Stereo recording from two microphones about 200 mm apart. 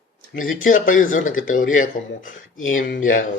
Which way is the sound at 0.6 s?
40° left (ahead or behind).